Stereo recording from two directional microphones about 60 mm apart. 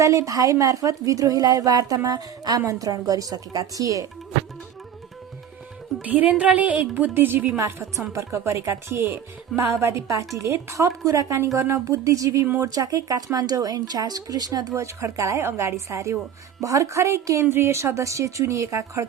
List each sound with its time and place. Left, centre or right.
0.0 s a woman's voice: right
2.6 s a woman's voice: right
6.0 s a woman's voice: right
8.1 s speech: right
9.8 s speech: right
12.9 s speech: right
17.4 s speech: right